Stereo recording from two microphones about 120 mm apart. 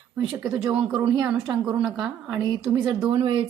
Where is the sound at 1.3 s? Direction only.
10° right (ahead or behind).